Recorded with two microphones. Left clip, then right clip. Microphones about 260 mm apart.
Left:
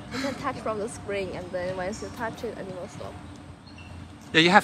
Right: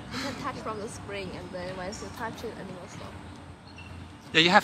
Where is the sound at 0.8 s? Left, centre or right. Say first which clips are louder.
Left 6 dB; left.